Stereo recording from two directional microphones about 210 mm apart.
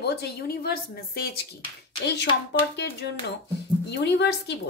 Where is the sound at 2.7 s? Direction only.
50° left (ahead or behind).